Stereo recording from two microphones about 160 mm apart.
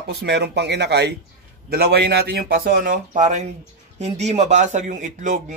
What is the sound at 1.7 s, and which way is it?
A man's voice, 80° right.